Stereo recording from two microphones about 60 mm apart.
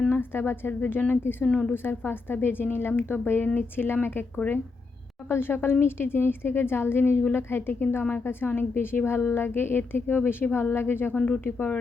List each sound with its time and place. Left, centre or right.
0.1 s a woman's voice: left
1.5 s a woman's voice: centre
1.7 s a woman's voice: left
5.3 s a woman's voice: left